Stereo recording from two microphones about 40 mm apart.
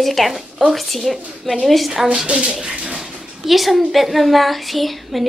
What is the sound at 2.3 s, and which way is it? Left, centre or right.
Speech, right.